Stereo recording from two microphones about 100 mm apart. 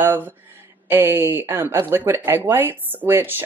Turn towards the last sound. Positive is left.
turn(degrees=-20)  # may be behind; listen again after turning